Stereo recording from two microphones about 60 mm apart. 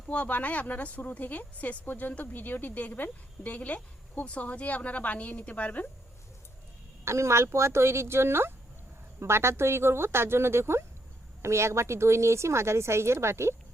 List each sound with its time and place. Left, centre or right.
0.1 s speech: left
7.0 s a woman's voice: right